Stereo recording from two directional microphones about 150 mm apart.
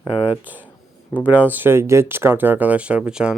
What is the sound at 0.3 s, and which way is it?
Speech, 10° right (ahead or behind).